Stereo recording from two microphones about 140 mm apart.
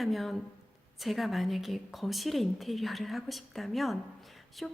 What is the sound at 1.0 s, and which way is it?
A woman's voice, centre (ahead or behind).